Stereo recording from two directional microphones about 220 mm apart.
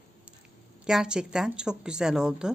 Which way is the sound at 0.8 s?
5° right (ahead or behind).